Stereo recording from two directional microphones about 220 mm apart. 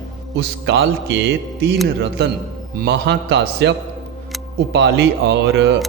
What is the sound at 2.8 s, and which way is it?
A man's voice, 50° right (ahead or behind).